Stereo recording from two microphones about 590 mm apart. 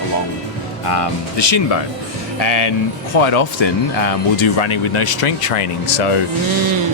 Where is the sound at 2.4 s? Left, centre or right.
Left.